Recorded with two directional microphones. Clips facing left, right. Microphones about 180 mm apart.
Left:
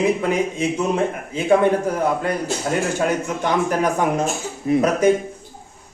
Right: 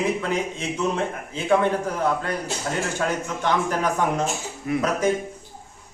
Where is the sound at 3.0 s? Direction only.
10° left (ahead or behind).